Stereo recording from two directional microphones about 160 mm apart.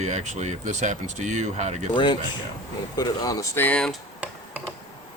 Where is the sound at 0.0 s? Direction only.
45° right (ahead or behind).